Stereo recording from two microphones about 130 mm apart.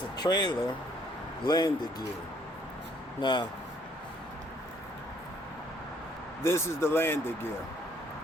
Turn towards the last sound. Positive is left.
turn(degrees=15)  # may be behind; listen again after turning